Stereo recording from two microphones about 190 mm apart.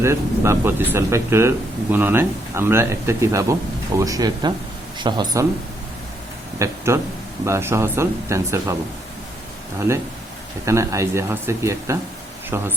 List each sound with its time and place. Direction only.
0.0 s speech: 15° right (ahead or behind)
6.6 s speech: 15° right (ahead or behind)
10.7 s speech: 15° right (ahead or behind)